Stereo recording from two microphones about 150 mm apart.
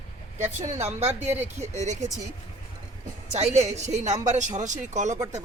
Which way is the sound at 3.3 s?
45° right (ahead or behind).